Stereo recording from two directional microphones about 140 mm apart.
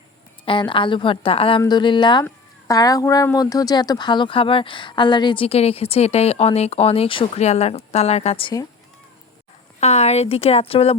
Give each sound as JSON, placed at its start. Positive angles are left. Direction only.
{"t": 0.4, "sound": "a woman's voice", "side_deg": 35}
{"t": 9.8, "sound": "a woman's voice", "side_deg": 50}